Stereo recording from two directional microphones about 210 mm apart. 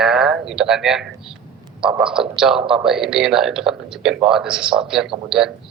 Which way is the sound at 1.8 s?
25° right (ahead or behind).